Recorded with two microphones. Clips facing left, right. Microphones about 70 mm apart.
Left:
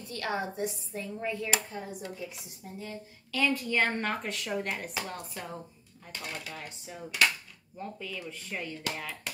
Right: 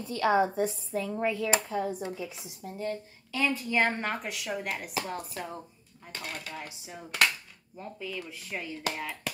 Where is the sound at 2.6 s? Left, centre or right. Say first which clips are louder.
Right 8 dB; right.